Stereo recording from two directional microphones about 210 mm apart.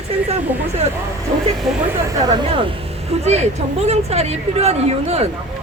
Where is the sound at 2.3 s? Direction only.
20° right (ahead or behind).